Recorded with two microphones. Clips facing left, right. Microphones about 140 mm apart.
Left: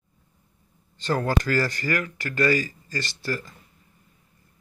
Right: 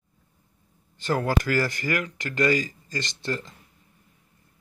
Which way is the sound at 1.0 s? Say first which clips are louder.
Even; 10° right (ahead or behind).